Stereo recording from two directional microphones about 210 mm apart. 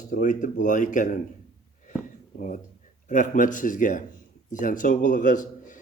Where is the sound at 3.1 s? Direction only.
35° left (ahead or behind).